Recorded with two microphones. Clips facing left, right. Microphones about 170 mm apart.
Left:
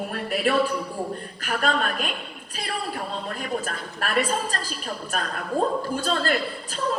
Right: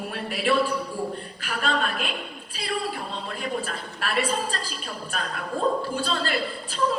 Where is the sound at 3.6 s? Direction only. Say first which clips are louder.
Left 1 dB; 45° left (ahead or behind).